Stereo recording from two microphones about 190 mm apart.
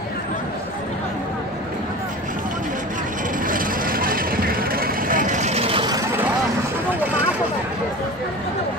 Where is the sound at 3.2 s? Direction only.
45° right (ahead or behind); by 6.3 s 15° right (ahead or behind).